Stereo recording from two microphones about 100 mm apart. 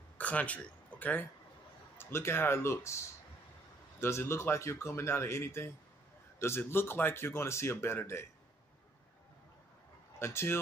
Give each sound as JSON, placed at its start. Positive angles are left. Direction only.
{"t": 0.2, "sound": "speech", "side_deg": 15}
{"t": 10.1, "sound": "speech", "side_deg": 25}